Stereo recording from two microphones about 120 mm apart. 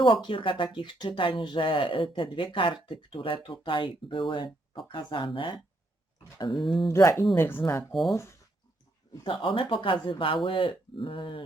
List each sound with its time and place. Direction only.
0.0 s speech: 45° left (ahead or behind)
6.6 s speech: centre (ahead or behind)
6.8 s speech: 25° left (ahead or behind)
9.2 s speech: 45° left (ahead or behind)